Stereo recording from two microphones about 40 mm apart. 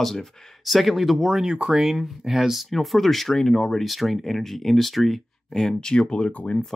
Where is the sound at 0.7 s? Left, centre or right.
Centre.